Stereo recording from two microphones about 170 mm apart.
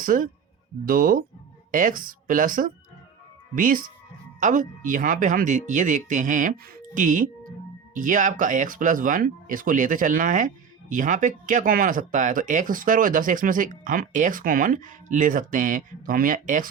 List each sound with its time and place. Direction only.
0.0 s speech: 55° right (ahead or behind)